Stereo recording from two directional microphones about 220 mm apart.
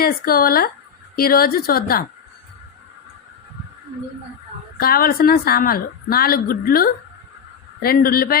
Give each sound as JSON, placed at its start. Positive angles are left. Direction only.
{"t": 0.0, "sound": "a woman's voice", "side_deg": 40}
{"t": 4.8, "sound": "a woman's voice", "side_deg": 45}